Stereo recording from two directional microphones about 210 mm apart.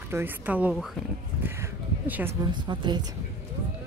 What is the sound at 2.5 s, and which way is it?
Speech, 20° right (ahead or behind).